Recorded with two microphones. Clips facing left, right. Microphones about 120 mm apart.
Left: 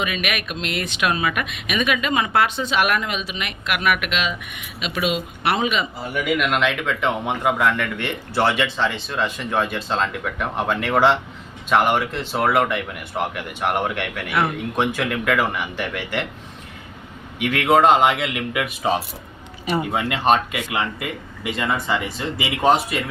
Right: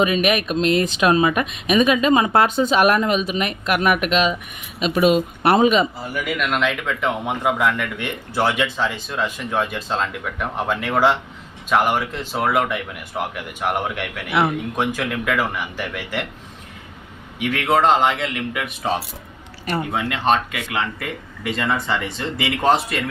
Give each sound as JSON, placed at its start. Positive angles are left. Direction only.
{"t": 0.0, "sound": "speech", "side_deg": -35}
{"t": 6.1, "sound": "a man's voice", "side_deg": 0}
{"t": 17.5, "sound": "a man's voice", "side_deg": 5}